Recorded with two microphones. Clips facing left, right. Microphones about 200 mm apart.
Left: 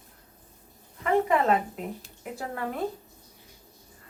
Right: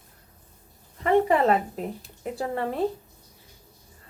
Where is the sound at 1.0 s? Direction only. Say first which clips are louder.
Right 3 dB; 30° right (ahead or behind).